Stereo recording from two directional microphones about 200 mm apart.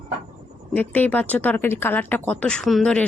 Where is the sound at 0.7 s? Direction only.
10° left (ahead or behind).